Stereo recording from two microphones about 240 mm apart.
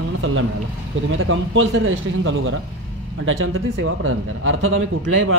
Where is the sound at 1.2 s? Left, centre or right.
Right.